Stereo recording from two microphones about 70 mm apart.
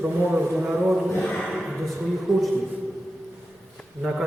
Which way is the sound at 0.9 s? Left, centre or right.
Centre.